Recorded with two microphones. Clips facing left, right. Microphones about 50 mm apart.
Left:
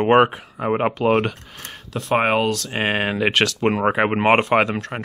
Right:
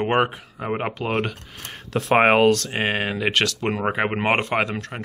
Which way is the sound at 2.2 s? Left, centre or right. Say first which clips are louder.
Right 4 dB; right.